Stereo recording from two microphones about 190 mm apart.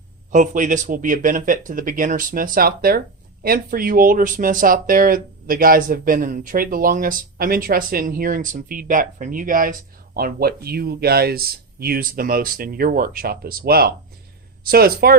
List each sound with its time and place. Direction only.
0.3 s speech: 45° right (ahead or behind)